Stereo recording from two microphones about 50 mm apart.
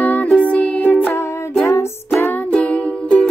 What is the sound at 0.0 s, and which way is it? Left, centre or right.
Music, left.